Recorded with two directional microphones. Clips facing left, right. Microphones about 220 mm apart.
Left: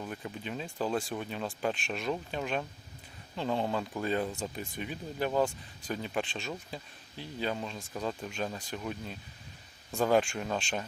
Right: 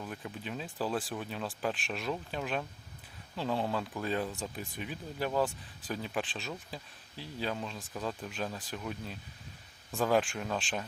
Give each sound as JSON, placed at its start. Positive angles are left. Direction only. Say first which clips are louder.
{"t": 0.0, "sound": "speech", "louder": "left 2 dB", "side_deg": 0}